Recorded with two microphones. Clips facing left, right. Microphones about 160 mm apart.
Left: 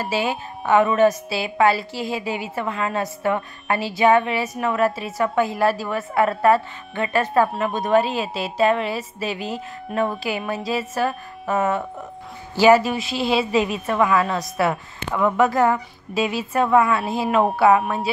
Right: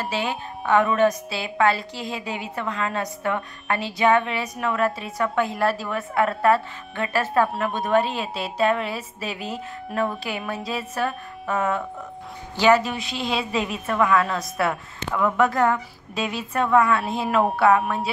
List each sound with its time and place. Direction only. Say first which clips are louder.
0.0 s speech: left 3 dB; 5° left (ahead or behind)
12.5 s speech: left 4 dB; 5° left (ahead or behind)
15.0 s speech: left 2 dB; 20° left (ahead or behind)
15.3 s speech: left 2 dB; centre (ahead or behind)